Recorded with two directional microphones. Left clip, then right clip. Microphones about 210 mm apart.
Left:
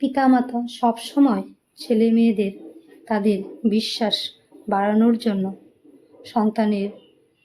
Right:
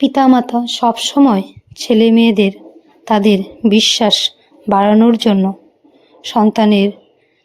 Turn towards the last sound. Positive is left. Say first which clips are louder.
# right 10 dB
turn(degrees=-35)  # may be behind; listen again after turning